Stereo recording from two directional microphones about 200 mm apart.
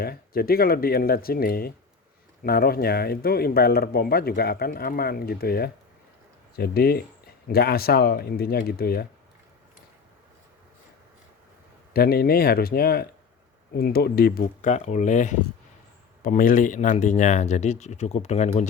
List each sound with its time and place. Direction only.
0.0 s speech: 50° left (ahead or behind)
11.9 s speech: 50° left (ahead or behind)